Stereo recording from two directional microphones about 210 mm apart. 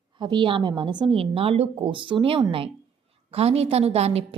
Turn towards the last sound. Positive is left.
turn(degrees=-30)  # may be behind; listen again after turning